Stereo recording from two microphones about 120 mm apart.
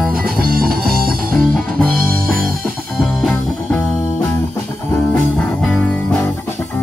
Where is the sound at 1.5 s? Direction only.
5° left (ahead or behind).